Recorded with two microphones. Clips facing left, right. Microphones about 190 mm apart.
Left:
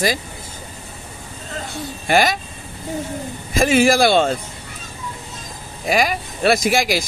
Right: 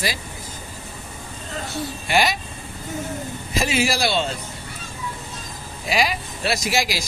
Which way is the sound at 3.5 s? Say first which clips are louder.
Left 8 dB; 50° left (ahead or behind).